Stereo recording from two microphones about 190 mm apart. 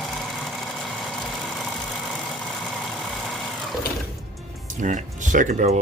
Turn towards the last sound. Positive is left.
turn(degrees=-45)  # may be behind; listen again after turning